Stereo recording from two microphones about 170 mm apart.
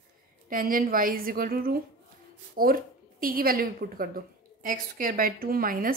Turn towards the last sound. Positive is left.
turn(degrees=-55)  # may be behind; listen again after turning